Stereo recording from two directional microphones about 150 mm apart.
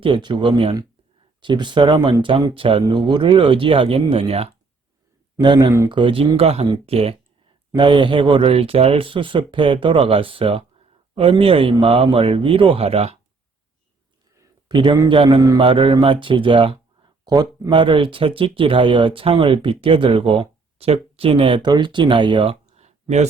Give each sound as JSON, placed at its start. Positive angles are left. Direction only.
{"t": 0.0, "sound": "speech", "side_deg": -30}
{"t": 5.4, "sound": "speech", "side_deg": -25}
{"t": 14.3, "sound": "a man's voice", "side_deg": -30}